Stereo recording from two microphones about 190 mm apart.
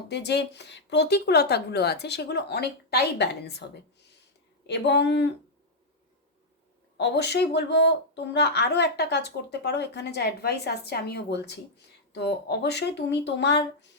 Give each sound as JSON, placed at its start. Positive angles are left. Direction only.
{"t": 0.1, "sound": "speech", "side_deg": 60}
{"t": 6.9, "sound": "speech", "side_deg": 60}